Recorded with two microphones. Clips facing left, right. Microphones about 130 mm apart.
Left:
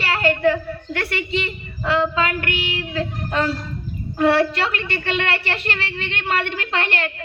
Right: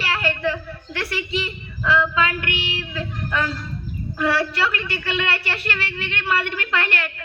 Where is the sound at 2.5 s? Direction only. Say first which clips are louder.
Left 2 dB; 25° right (ahead or behind).